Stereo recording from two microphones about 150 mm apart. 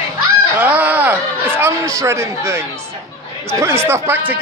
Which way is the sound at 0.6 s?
10° right (ahead or behind).